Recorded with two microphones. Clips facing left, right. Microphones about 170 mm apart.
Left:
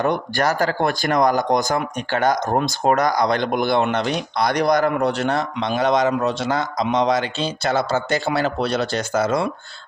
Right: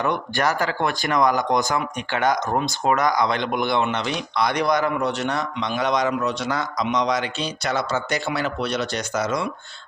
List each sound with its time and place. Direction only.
0.0 s a man's voice: 35° left (ahead or behind)